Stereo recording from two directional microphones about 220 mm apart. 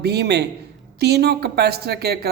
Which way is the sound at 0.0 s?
50° right (ahead or behind).